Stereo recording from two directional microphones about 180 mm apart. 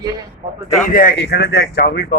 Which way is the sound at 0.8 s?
55° left (ahead or behind).